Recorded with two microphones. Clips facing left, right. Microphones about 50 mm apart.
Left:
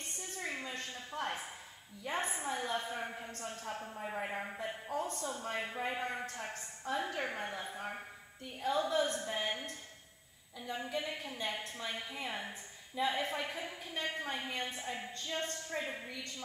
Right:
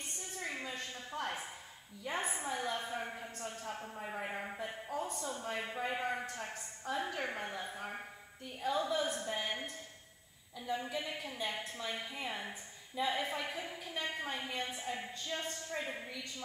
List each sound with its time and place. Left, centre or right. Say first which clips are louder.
0.4 s a sound: even; centre
2.0 s a woman's voice: left 1 dB; centre
8.7 s a woman's voice: left 2 dB; centre
9.2 s a woman's voice: left 1 dB; centre
10.7 s a woman's voice: even; centre